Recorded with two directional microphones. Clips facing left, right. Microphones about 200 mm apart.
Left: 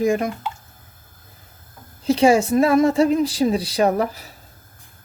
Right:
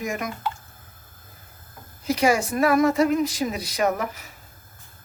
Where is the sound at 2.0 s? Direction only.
25° left (ahead or behind).